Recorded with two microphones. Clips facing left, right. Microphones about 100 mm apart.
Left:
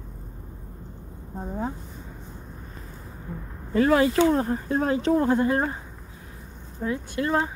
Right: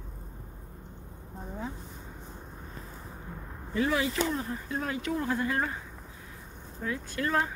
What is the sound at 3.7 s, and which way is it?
Speech, 60° left (ahead or behind).